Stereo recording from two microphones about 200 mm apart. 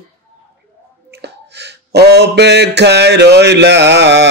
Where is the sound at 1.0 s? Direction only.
55° right (ahead or behind).